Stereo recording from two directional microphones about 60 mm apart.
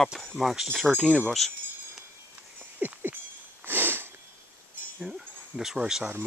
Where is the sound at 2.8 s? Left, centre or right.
Right.